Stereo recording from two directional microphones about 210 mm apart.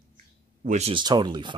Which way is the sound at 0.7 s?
30° right (ahead or behind).